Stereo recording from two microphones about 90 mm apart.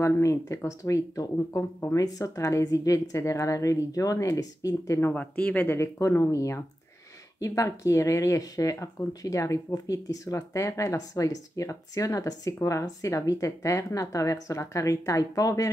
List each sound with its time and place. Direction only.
0.0 s speech: 35° left (ahead or behind)
1.6 s speech: 25° left (ahead or behind)
2.0 s speech: 40° left (ahead or behind)
5.1 s speech: 15° left (ahead or behind)
5.8 s speech: 35° left (ahead or behind)